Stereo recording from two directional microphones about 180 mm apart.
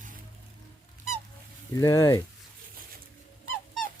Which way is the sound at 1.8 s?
15° left (ahead or behind).